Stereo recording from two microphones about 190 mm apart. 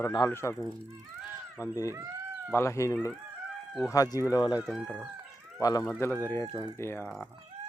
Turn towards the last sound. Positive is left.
turn(degrees=5)  # may be behind; listen again after turning